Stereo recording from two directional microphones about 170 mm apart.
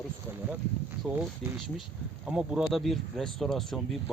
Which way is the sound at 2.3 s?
5° right (ahead or behind).